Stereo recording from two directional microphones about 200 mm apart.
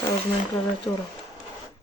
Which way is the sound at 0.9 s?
10° left (ahead or behind).